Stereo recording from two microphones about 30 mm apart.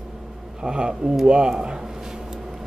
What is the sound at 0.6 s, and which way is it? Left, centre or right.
A man's voice, right.